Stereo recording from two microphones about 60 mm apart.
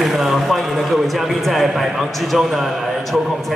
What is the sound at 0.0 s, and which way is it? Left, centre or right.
Speech, centre.